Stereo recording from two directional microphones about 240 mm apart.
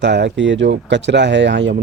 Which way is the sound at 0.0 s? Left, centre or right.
Right.